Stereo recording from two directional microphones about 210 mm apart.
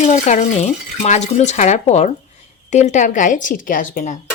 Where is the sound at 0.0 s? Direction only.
35° left (ahead or behind).